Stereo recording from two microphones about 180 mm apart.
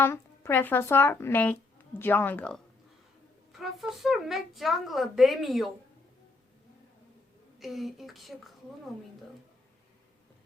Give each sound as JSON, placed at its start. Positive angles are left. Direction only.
{"t": 0.0, "sound": "speech", "side_deg": 15}
{"t": 3.6, "sound": "speech", "side_deg": 0}
{"t": 7.6, "sound": "speech", "side_deg": 0}